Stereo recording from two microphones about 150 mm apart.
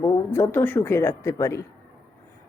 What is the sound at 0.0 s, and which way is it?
Speech, 15° left (ahead or behind).